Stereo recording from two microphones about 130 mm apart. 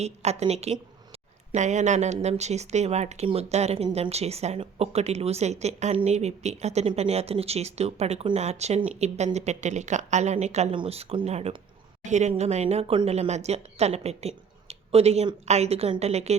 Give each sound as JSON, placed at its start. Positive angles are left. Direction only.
{"t": 0.0, "sound": "speech", "side_deg": -55}
{"t": 1.5, "sound": "a woman's voice", "side_deg": -65}
{"t": 12.0, "sound": "a woman's voice", "side_deg": -65}